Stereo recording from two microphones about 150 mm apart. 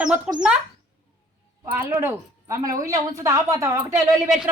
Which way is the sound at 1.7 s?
15° right (ahead or behind).